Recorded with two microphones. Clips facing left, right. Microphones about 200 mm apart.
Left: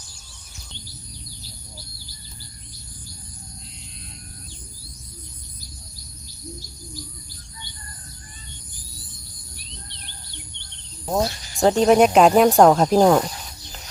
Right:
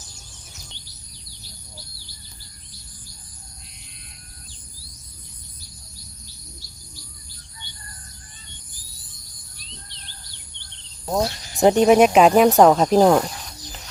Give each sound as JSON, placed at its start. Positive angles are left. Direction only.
{"t": 11.0, "sound": "cricket", "side_deg": 0}
{"t": 11.5, "sound": "speech", "side_deg": -20}
{"t": 11.9, "sound": "speech", "side_deg": 0}